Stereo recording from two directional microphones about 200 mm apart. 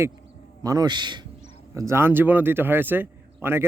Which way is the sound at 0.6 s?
20° right (ahead or behind).